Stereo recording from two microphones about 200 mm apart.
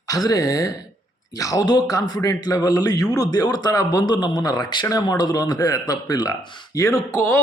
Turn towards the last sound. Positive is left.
turn(degrees=10)  # may be behind; listen again after turning